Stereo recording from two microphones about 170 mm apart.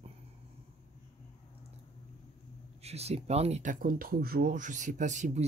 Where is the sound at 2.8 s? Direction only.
40° right (ahead or behind).